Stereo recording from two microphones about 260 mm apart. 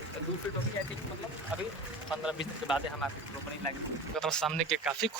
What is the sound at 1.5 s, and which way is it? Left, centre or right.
Speech, centre.